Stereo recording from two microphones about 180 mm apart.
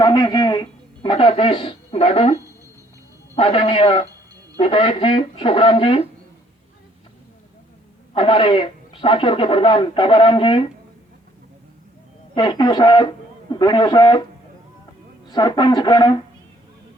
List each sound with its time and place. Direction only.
0.0 s speech: 25° left (ahead or behind)
8.1 s speech: 25° left (ahead or behind)
12.3 s speech: 25° left (ahead or behind)
15.3 s speech: 25° left (ahead or behind)